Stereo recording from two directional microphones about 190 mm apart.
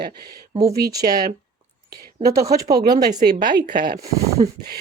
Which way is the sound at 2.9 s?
20° right (ahead or behind).